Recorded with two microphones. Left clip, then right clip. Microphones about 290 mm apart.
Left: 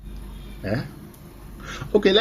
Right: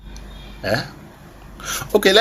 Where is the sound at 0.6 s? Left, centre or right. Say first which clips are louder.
Right 7 dB; right.